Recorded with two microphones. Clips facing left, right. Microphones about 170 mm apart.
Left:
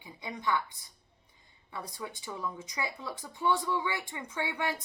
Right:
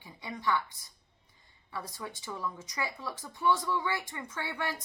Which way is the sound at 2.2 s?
15° left (ahead or behind).